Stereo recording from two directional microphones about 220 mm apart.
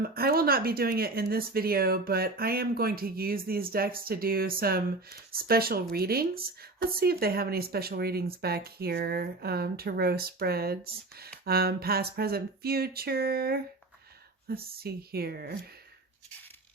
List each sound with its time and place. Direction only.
0.0 s speech: 45° right (ahead or behind)